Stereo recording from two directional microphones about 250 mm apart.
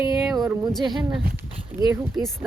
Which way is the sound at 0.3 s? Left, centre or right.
Centre.